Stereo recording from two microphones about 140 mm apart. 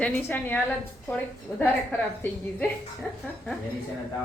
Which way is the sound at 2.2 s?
15° left (ahead or behind).